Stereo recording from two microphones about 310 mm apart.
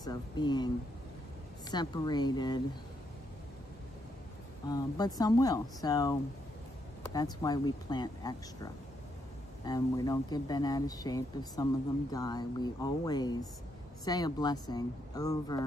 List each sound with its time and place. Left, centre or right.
0.0 s speech: centre
1.7 s speech: centre
4.6 s speech: centre
7.2 s speech: centre